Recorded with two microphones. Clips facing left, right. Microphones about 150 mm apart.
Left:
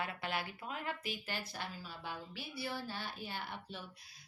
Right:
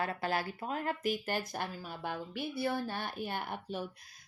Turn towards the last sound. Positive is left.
turn(degrees=-50)  # may be behind; listen again after turning